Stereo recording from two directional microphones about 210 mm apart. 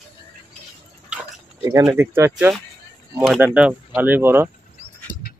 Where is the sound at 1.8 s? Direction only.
10° right (ahead or behind).